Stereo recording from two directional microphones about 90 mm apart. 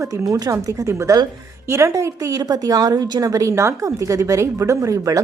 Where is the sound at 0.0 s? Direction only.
35° right (ahead or behind).